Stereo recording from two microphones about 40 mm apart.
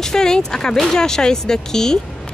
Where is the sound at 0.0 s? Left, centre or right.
Centre.